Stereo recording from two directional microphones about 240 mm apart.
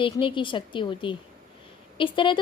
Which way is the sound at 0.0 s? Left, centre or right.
Left.